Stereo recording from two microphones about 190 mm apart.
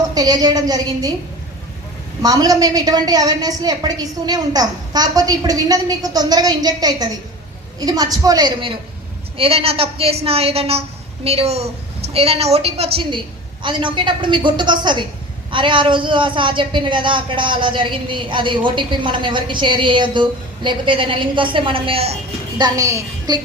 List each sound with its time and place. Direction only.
0.1 s a woman's voice: 20° right (ahead or behind)
2.2 s a woman's voice: 20° right (ahead or behind)